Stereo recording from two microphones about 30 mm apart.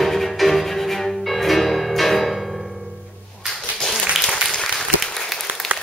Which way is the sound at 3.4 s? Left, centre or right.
Centre.